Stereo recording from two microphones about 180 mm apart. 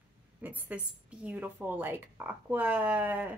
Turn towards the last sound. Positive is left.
turn(degrees=-10)  # may be behind; listen again after turning